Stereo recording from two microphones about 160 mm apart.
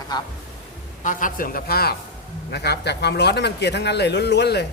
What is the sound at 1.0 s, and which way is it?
Speech, 55° left (ahead or behind).